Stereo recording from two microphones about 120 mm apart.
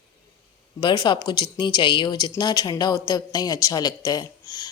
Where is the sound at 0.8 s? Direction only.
35° left (ahead or behind).